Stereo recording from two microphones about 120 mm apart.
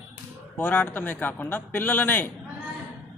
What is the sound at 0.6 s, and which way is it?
Speech, 15° left (ahead or behind).